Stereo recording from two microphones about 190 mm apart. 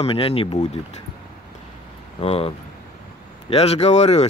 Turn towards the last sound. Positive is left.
turn(degrees=35)  # may be behind; listen again after turning